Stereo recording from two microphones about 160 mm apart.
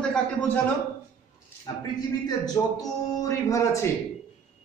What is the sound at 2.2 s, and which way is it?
A woman's voice, 25° left (ahead or behind).